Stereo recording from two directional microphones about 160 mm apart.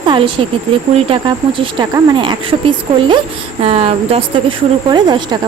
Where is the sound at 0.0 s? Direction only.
30° right (ahead or behind).